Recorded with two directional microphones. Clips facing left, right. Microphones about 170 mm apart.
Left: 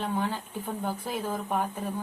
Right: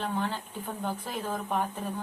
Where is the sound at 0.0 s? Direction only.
10° left (ahead or behind).